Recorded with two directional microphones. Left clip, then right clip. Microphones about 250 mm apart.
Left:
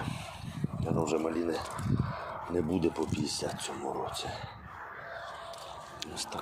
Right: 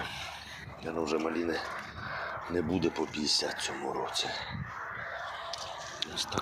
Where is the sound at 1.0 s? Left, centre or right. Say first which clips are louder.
Right 1 dB; centre.